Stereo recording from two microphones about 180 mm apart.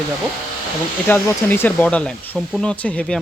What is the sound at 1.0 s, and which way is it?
Speech, 10° left (ahead or behind).